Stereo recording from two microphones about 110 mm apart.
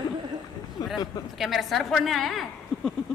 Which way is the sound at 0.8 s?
35° left (ahead or behind).